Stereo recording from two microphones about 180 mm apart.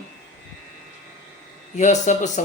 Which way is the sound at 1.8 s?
40° left (ahead or behind).